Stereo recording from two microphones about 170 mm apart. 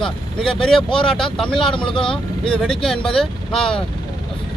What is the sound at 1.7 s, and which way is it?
Speech, 30° left (ahead or behind).